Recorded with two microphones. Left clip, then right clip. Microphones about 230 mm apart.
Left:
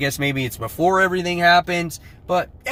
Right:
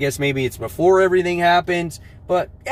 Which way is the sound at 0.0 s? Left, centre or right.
Centre.